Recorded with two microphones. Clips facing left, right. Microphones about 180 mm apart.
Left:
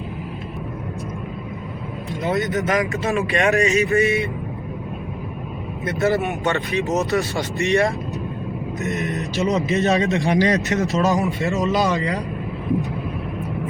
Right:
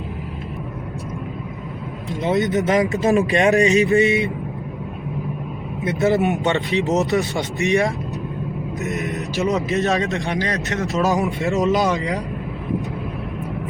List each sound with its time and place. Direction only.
2.0 s speech: 20° right (ahead or behind)
3.0 s speech: 35° right (ahead or behind)
3.8 s speech: 20° right (ahead or behind)
5.8 s speech: 20° right (ahead or behind)
8.8 s mantra: centre (ahead or behind)
9.5 s a man's voice: centre (ahead or behind)
10.3 s speech: 20° left (ahead or behind)
10.7 s a man's voice: centre (ahead or behind)
11.6 s speech: 20° right (ahead or behind)